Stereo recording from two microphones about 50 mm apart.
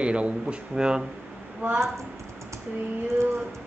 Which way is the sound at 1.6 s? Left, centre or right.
Right.